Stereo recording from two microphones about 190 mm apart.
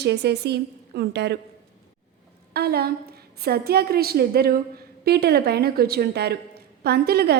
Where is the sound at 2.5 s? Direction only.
55° right (ahead or behind).